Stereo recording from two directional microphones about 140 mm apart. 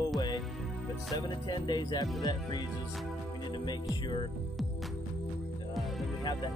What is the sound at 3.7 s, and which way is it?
Music, 30° left (ahead or behind).